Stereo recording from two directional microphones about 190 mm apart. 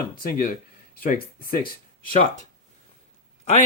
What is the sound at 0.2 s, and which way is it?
Speech, 50° left (ahead or behind).